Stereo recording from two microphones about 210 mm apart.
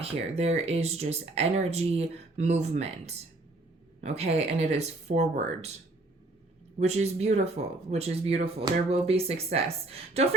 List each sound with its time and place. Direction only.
0.0 s speech: 30° right (ahead or behind)
6.7 s speech: 30° right (ahead or behind)